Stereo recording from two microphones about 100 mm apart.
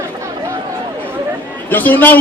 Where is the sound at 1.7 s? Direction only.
20° left (ahead or behind).